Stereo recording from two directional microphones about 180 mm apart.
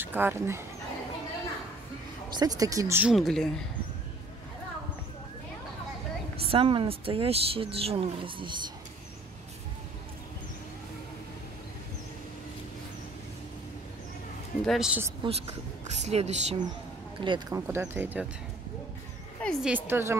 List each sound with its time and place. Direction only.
0.0 s speech: 10° right (ahead or behind)
2.3 s speech: 20° right (ahead or behind)
3.1 s speech: centre (ahead or behind)
6.4 s a woman's voice: 30° right (ahead or behind)
14.6 s speech: centre (ahead or behind)
15.2 s speech: 25° right (ahead or behind)
16.0 s a woman's voice: 40° right (ahead or behind)
17.2 s speech: 25° right (ahead or behind)
19.4 s a sound: centre (ahead or behind)
19.7 s speech: 15° right (ahead or behind)